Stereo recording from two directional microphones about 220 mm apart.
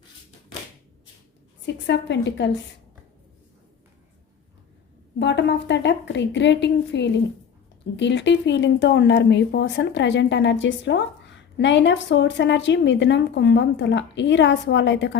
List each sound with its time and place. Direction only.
1.6 s a woman's voice: 50° left (ahead or behind)
5.2 s a woman's voice: 50° left (ahead or behind)